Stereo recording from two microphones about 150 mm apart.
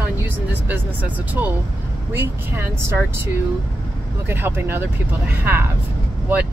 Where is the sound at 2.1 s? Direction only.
15° right (ahead or behind).